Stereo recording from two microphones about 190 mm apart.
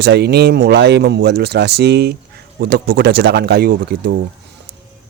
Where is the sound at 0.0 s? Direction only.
60° right (ahead or behind).